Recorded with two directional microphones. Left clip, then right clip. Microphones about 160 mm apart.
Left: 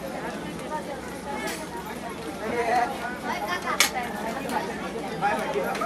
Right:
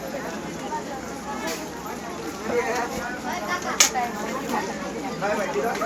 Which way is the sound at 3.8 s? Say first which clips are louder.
Right 3 dB; 35° right (ahead or behind).